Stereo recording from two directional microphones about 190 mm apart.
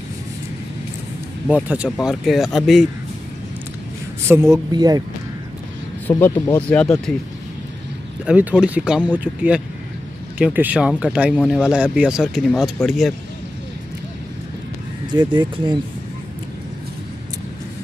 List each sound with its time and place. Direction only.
1.5 s speech: 5° right (ahead or behind)
4.3 s speech: 10° right (ahead or behind)
4.7 s speech: 20° right (ahead or behind)
6.0 s speech: 10° left (ahead or behind)
8.3 s speech: 5° right (ahead or behind)
15.1 s speech: 25° right (ahead or behind)